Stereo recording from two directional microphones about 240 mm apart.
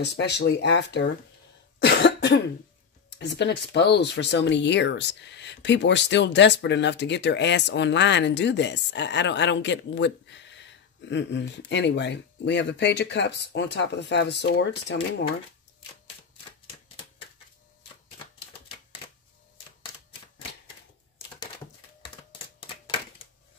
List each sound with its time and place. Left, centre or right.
0.0 s speech: left
1.8 s cough: left
3.2 s speech: left